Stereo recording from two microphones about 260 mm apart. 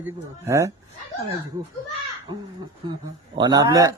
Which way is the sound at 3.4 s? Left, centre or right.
Centre.